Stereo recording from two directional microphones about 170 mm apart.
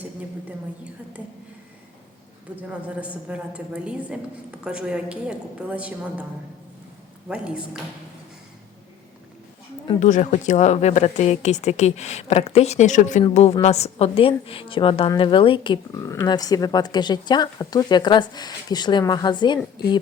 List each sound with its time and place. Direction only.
2.6 s a woman's voice: 10° right (ahead or behind)
7.3 s speech: 5° right (ahead or behind)
10.0 s speech: 45° left (ahead or behind); by 19.5 s 25° left (ahead or behind)